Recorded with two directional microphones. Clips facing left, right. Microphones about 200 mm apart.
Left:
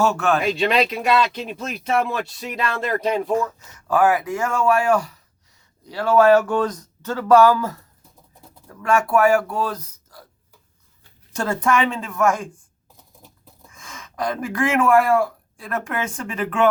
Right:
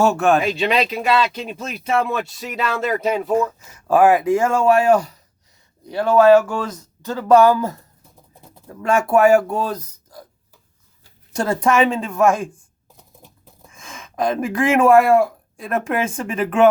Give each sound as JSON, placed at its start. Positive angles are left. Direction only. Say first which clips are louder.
{"t": 0.1, "sound": "speech", "louder": "right 4 dB", "side_deg": -50}
{"t": 0.5, "sound": "speech", "louder": "even", "side_deg": -5}
{"t": 3.3, "sound": "speech", "louder": "right 3 dB", "side_deg": -25}
{"t": 11.3, "sound": "speech", "louder": "right 3 dB", "side_deg": -20}
{"t": 13.7, "sound": "speech", "louder": "right 5 dB", "side_deg": -25}